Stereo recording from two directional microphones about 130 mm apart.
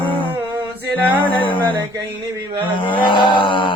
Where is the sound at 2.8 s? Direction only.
40° left (ahead or behind).